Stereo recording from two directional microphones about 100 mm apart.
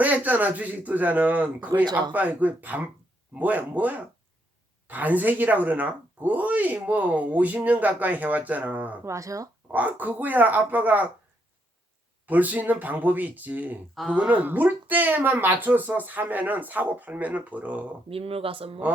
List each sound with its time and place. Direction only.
0.0 s speech: 15° right (ahead or behind)
9.0 s speech: 30° right (ahead or behind)
9.7 s speech: 15° right (ahead or behind)
12.2 s speech: 15° right (ahead or behind)
18.1 s speech: 75° right (ahead or behind)